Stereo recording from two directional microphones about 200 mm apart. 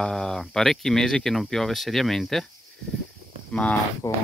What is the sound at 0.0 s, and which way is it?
Speech, centre (ahead or behind).